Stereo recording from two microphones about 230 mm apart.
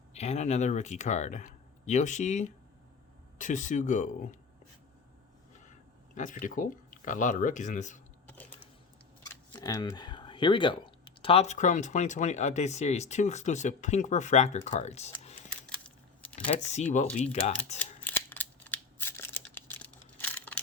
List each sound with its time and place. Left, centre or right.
0.1 s speech: left
6.1 s speech: left
8.3 s a sound: centre
9.2 s speech: centre
16.5 s speech: left
18.0 s scissors: centre